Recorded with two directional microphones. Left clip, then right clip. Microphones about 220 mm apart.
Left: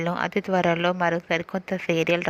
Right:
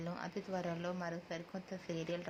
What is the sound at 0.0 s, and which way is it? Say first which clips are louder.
Speech: left 18 dB; 35° left (ahead or behind).